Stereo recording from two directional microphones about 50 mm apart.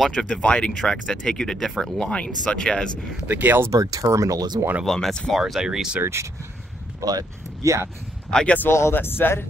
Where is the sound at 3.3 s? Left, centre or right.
Right.